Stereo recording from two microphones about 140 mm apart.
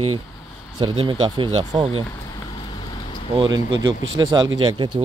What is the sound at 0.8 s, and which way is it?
Speech, 35° right (ahead or behind).